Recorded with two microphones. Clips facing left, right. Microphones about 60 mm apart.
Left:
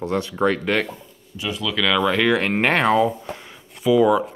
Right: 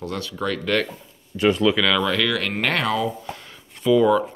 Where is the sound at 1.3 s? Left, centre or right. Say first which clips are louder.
Right 9 dB; right.